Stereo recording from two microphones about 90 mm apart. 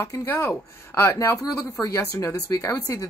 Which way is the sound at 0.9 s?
35° left (ahead or behind).